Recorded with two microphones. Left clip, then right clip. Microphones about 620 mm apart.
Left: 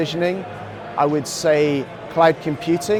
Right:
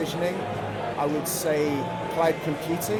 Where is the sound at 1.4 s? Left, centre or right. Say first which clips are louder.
Left 9 dB; left.